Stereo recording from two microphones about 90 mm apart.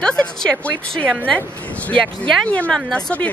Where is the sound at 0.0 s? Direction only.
10° left (ahead or behind).